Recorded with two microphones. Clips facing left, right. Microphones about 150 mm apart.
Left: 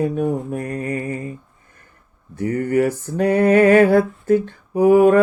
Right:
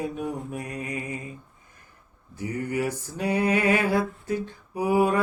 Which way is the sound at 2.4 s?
60° left (ahead or behind).